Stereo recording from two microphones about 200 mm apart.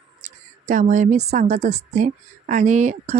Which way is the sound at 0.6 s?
40° right (ahead or behind).